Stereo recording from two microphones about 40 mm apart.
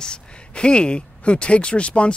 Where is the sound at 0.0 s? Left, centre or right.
Left.